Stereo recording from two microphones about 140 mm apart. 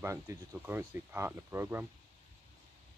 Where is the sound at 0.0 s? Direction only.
20° right (ahead or behind).